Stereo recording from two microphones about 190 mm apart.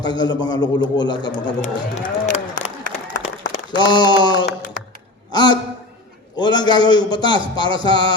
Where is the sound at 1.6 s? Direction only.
35° left (ahead or behind).